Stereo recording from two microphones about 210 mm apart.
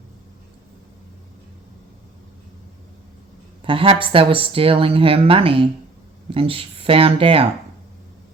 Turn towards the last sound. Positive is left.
turn(degrees=-25)  # may be behind; listen again after turning